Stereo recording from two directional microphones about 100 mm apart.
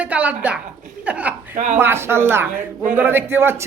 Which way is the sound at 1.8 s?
25° right (ahead or behind).